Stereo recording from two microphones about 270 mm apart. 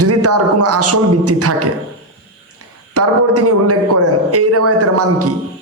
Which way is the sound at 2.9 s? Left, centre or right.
Right.